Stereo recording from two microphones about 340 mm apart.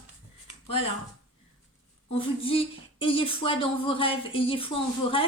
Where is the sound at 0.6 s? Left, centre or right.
Centre.